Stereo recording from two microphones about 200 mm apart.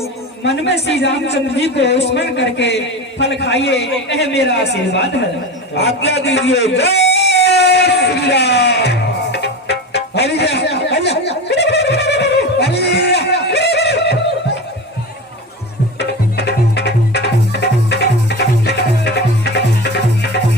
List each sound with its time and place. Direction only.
0.4 s a man's voice: 55° left (ahead or behind)
6.2 s a sound: 60° left (ahead or behind)
16.0 s music: 55° left (ahead or behind)